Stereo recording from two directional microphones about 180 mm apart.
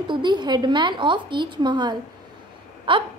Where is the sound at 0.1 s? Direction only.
25° right (ahead or behind).